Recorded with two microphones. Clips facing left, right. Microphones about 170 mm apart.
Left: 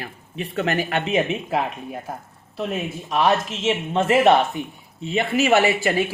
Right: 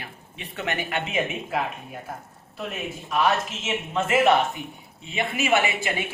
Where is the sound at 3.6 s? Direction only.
30° left (ahead or behind).